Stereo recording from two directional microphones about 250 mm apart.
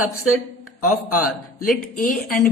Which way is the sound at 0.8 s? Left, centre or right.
Left.